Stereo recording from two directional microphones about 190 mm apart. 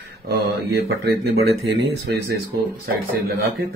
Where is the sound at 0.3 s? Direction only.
55° right (ahead or behind).